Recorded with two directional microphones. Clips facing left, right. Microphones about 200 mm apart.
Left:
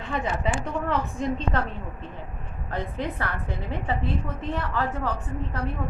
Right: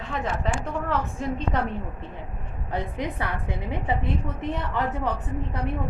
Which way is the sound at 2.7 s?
15° right (ahead or behind).